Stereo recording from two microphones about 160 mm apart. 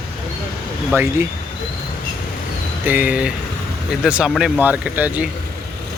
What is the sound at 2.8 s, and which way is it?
Speech, 10° right (ahead or behind).